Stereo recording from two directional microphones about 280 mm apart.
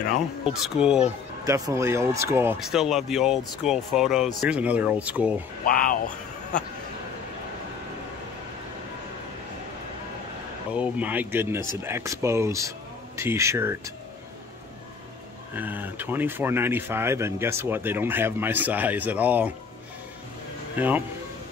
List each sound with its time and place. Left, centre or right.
0.5 s speech: centre
5.7 s speech: left
10.7 s speech: centre
15.5 s speech: centre
20.7 s speech: centre